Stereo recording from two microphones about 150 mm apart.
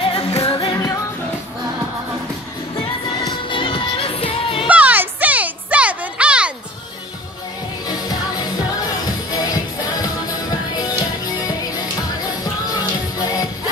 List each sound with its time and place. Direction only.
0.0 s music: 35° left (ahead or behind)
3.3 s music: 35° left (ahead or behind)
4.6 s music: 10° right (ahead or behind)
7.9 s music: 25° left (ahead or behind)